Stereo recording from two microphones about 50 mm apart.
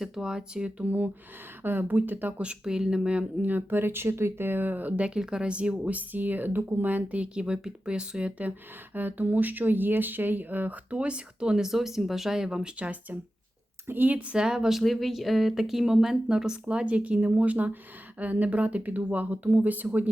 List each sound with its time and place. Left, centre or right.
0.0 s speech: centre
0.9 s speech: right
2.4 s speech: centre
3.4 s speech: right
5.0 s speech: centre
9.0 s speech: right
10.9 s speech: right
12.8 s speech: right
13.8 s speech: right
14.3 s speech: centre
14.8 s speech: centre; by 20.1 s right